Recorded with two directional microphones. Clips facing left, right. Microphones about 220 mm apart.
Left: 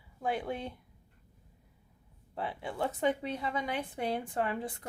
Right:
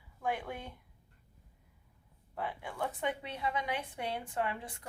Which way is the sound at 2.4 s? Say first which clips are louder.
Left 3 dB; 30° left (ahead or behind).